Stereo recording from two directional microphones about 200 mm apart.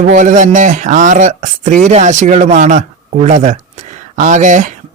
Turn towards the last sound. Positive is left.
turn(degrees=-40)  # may be behind; listen again after turning